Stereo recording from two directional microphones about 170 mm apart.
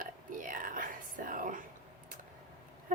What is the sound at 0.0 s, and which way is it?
Whispering, 50° right (ahead or behind).